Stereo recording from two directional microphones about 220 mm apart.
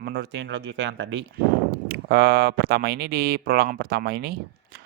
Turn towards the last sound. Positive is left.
turn(degrees=-45)  # may be behind; listen again after turning